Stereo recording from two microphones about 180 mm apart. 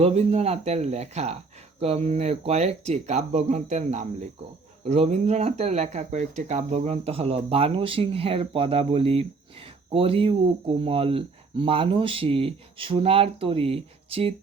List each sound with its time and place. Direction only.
0.0 s speech: 35° right (ahead or behind)